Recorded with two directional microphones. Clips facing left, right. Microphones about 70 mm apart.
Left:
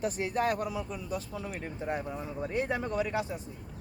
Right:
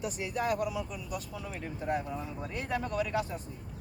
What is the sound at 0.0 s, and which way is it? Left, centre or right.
Speech, left.